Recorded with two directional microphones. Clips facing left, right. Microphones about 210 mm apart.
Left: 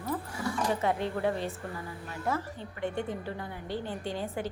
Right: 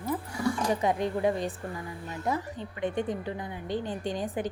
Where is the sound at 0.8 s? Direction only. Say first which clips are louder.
Right 4 dB; 15° right (ahead or behind).